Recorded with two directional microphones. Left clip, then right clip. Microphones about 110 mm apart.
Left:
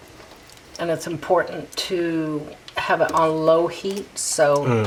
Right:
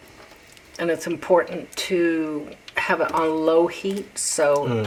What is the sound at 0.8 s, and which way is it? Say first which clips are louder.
Speech: right 1 dB; 45° right (ahead or behind).